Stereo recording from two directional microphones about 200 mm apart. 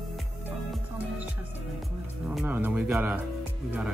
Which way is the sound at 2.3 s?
5° right (ahead or behind).